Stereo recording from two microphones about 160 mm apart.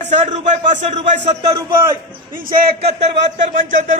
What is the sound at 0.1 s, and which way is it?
A man's voice, 45° right (ahead or behind).